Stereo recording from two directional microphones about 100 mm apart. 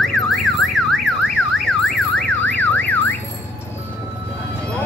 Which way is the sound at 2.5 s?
15° left (ahead or behind).